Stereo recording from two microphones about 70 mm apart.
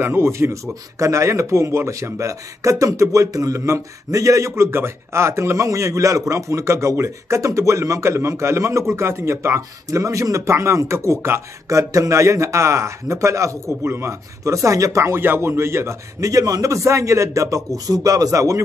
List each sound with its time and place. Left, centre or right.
0.0 s a man's voice: right
15.1 s a man's voice: right
16.2 s speech: right
17.8 s speech: right